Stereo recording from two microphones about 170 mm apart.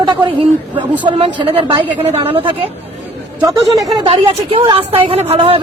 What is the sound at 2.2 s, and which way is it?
Speech, 30° right (ahead or behind).